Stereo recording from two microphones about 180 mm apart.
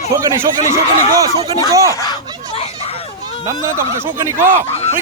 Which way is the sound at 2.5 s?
30° left (ahead or behind).